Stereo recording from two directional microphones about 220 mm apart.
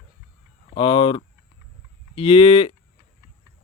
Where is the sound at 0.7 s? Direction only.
20° left (ahead or behind).